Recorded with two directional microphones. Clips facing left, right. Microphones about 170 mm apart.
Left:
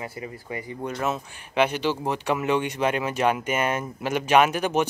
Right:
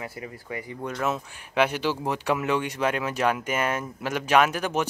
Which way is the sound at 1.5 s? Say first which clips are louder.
Left 1 dB; 10° right (ahead or behind).